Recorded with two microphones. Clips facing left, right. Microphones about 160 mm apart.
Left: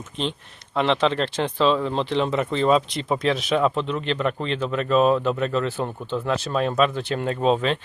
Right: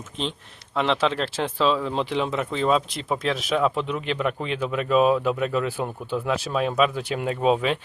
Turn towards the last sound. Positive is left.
turn(degrees=-10)  # may be behind; listen again after turning